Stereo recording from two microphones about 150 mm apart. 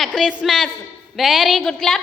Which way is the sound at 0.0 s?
Centre (ahead or behind).